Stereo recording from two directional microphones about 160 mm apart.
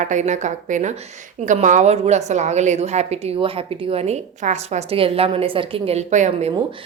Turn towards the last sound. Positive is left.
turn(degrees=-50)  # may be behind; listen again after turning